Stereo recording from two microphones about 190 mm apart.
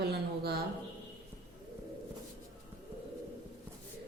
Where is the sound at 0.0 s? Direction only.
55° right (ahead or behind).